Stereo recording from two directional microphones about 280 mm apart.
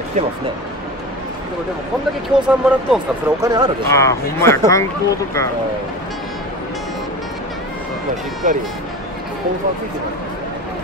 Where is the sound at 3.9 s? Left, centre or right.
Centre.